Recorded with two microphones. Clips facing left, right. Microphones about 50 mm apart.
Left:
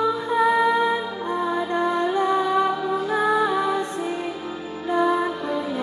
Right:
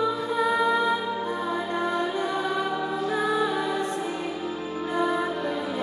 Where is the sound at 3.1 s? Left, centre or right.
Left.